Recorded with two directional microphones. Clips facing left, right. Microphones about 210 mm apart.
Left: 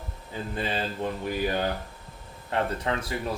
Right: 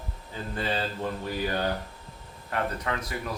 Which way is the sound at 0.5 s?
20° left (ahead or behind).